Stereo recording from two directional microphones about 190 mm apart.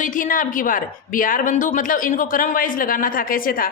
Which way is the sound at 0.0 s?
45° left (ahead or behind).